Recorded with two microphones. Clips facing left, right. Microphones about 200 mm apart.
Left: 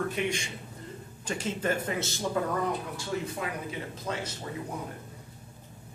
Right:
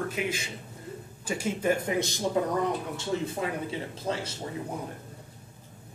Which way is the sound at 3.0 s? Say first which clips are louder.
Right 3 dB; 30° right (ahead or behind).